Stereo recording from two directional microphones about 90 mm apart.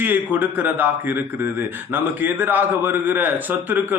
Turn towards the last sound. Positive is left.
turn(degrees=-20)  # may be behind; listen again after turning